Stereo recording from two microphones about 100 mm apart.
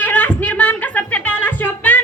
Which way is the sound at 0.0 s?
15° left (ahead or behind).